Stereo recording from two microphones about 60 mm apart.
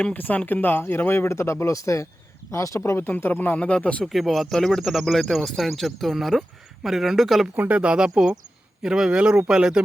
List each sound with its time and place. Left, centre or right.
0.0 s speech: left
3.2 s speech: left
3.7 s speech: centre
4.0 s speech: centre
7.5 s speech: right